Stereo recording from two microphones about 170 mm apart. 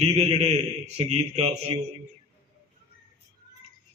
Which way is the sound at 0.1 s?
35° right (ahead or behind).